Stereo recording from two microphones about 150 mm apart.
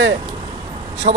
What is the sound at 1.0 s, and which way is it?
Speech, 65° right (ahead or behind).